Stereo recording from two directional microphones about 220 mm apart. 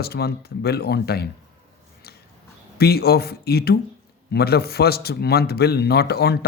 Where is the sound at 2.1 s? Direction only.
45° left (ahead or behind).